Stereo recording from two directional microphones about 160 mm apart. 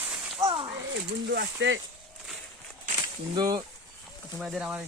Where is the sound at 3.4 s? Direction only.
25° right (ahead or behind).